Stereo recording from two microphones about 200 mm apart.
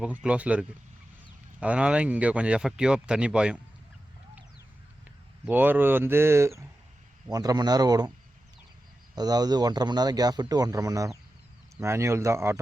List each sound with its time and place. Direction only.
0.0 s speech: 5° right (ahead or behind)
5.5 s speech: 10° right (ahead or behind)
9.1 s speech: 20° right (ahead or behind)